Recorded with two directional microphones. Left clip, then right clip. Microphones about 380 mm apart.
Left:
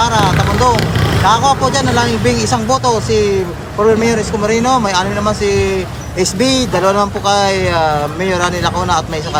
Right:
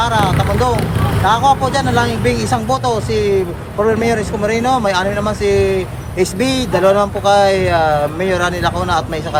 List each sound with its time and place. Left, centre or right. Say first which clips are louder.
0.0 s speech: left 2 dB; centre